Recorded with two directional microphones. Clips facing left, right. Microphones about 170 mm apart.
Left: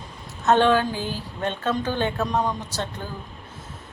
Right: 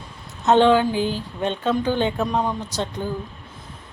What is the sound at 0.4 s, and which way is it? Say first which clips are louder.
Speech: right 3 dB; 15° right (ahead or behind).